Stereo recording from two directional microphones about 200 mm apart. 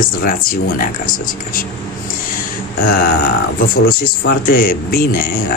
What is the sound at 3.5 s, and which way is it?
Speech, 50° left (ahead or behind).